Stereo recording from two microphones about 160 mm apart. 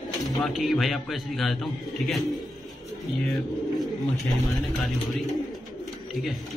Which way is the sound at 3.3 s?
Centre (ahead or behind).